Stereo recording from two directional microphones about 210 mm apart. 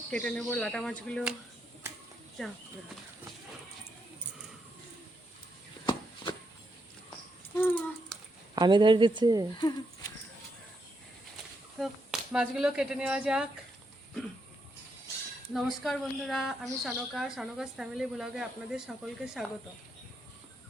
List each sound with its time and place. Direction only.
0.1 s a woman's voice: 5° left (ahead or behind)
5.8 s walk: 20° left (ahead or behind)
7.5 s a sound: 5° left (ahead or behind)
8.5 s a woman's voice: 20° right (ahead or behind)
9.6 s speech: 20° left (ahead or behind)
11.8 s a woman's voice: centre (ahead or behind)
15.5 s a woman's voice: centre (ahead or behind)